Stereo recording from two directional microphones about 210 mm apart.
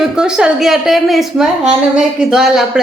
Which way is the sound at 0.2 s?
5° right (ahead or behind).